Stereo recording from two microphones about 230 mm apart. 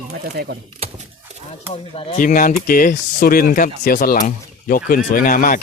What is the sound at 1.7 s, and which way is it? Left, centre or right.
Speech, left.